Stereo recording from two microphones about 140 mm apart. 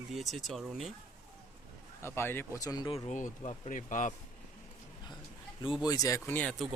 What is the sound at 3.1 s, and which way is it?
Speech, 60° left (ahead or behind).